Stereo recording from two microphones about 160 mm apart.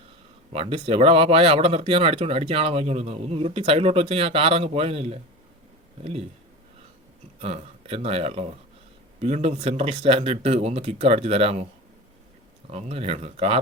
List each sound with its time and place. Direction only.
0.5 s speech: 35° right (ahead or behind)
7.3 s speech: 40° right (ahead or behind)
12.7 s speech: 40° right (ahead or behind)